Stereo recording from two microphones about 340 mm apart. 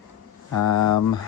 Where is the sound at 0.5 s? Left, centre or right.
Left.